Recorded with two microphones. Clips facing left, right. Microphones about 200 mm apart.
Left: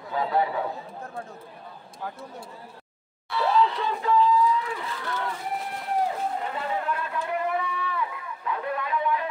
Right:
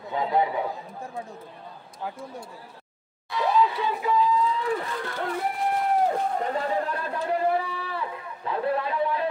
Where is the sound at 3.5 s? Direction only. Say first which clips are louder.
Even; 10° right (ahead or behind).